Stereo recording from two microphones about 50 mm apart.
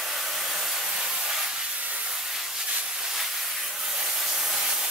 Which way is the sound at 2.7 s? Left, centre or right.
Centre.